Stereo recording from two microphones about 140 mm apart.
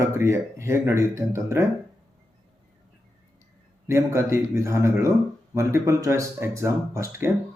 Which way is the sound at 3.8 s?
20° right (ahead or behind).